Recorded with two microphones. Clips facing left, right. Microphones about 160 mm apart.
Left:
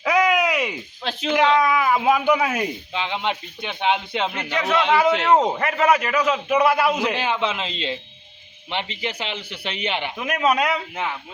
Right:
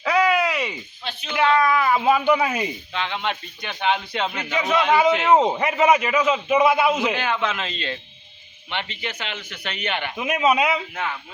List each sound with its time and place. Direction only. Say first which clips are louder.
0.0 s a sound: left 1 dB; 10° left (ahead or behind)
1.0 s speech: left 9 dB; 90° left
1.5 s speech: even; 5° left (ahead or behind)
7.2 s a man's voice: left 1 dB; 25° left (ahead or behind)
8.7 s speech: left 3 dB; 30° left (ahead or behind)
10.2 s speech: right 1 dB; 5° right (ahead or behind)